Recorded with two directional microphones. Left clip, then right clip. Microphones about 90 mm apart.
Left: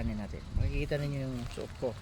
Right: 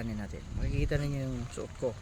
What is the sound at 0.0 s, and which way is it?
Speech, 40° right (ahead or behind).